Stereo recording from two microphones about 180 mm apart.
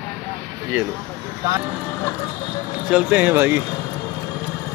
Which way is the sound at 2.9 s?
10° right (ahead or behind).